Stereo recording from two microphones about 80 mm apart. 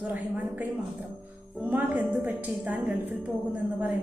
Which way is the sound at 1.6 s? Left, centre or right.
Centre.